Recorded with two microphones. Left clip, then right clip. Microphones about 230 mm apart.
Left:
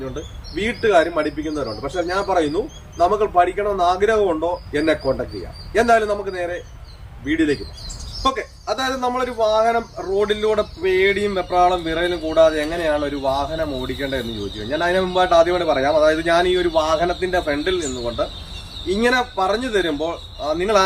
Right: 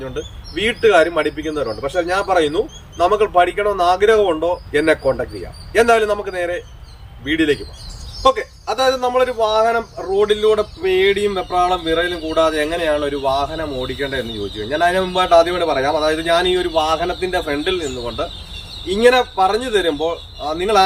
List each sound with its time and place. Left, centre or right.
0.2 s a man's voice: centre